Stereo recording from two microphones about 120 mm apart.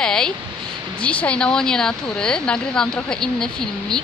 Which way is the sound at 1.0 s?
10° left (ahead or behind).